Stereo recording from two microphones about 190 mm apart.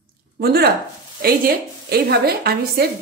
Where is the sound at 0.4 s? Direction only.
55° right (ahead or behind).